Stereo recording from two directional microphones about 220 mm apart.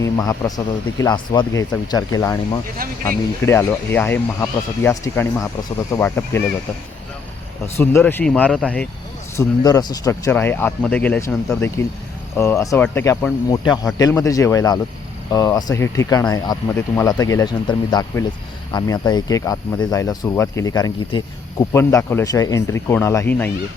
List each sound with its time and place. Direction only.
0.0 s speech: 15° left (ahead or behind)
7.8 s speech: 10° left (ahead or behind)
9.3 s speech: 15° left (ahead or behind)